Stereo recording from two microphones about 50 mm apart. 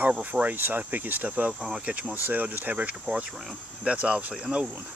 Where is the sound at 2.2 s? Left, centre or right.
Right; by 4.6 s centre.